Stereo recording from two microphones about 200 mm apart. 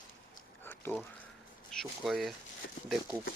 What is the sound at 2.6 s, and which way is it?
Speech, 70° left (ahead or behind).